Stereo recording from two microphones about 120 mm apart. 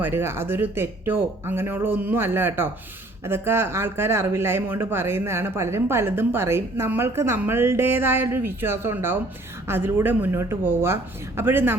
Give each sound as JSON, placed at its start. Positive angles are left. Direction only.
{"t": 0.0, "sound": "speech", "side_deg": -20}